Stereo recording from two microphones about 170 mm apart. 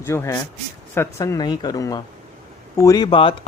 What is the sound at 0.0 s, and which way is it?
Speech, 15° left (ahead or behind).